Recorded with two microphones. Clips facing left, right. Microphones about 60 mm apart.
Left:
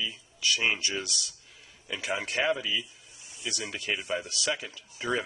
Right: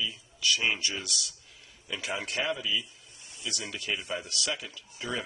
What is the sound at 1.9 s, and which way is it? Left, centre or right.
Speech, centre.